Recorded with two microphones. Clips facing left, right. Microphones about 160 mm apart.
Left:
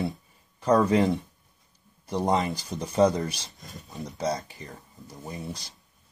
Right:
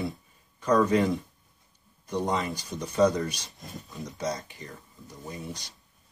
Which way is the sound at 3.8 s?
30° left (ahead or behind).